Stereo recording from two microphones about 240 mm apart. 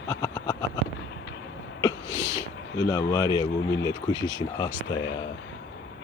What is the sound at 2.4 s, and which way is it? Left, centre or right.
Speech, centre.